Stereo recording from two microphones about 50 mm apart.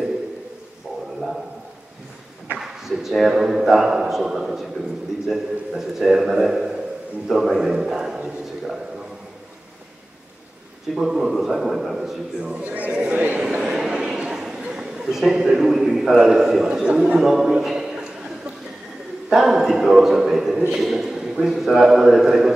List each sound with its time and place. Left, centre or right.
2.5 s a man's voice: centre
11.0 s a man's voice: centre
12.5 s speech: right
13.4 s a man's voice: centre
17.2 s a sound: centre
19.2 s a man's voice: centre